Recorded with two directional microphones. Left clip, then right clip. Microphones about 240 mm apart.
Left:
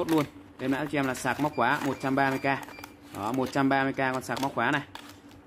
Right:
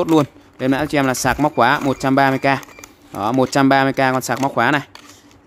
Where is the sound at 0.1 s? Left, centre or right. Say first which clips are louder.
Right 11 dB; right.